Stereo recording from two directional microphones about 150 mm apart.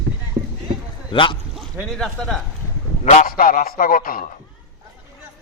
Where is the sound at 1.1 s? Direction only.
35° left (ahead or behind).